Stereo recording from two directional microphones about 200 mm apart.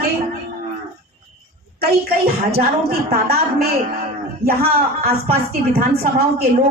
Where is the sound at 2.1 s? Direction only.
50° right (ahead or behind).